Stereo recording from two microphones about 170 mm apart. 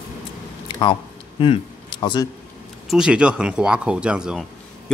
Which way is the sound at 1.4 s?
30° left (ahead or behind).